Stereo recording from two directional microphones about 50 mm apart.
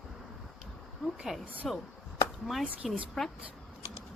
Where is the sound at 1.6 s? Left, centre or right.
Centre.